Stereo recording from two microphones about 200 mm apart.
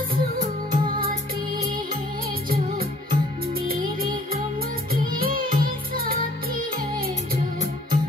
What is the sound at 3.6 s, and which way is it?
Music, 45° right (ahead or behind).